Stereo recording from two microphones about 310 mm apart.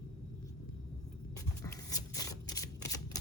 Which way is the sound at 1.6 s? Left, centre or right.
Centre.